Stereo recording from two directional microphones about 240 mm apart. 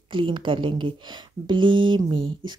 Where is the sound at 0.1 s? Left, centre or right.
Centre.